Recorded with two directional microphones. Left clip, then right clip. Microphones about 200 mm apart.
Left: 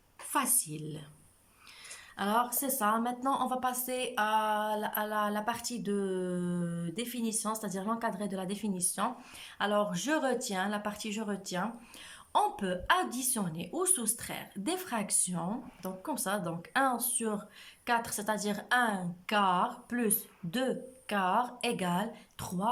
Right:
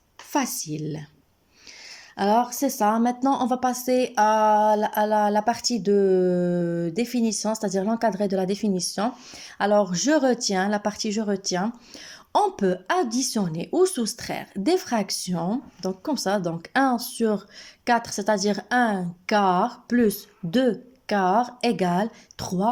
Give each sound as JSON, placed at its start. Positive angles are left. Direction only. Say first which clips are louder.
{"t": 0.3, "sound": "a woman's voice", "louder": "right 6 dB", "side_deg": -25}
{"t": 2.1, "sound": "a woman's voice", "louder": "right 9 dB", "side_deg": -25}